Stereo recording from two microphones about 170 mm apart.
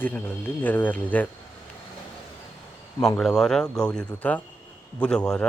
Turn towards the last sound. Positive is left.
turn(degrees=5)  # may be behind; listen again after turning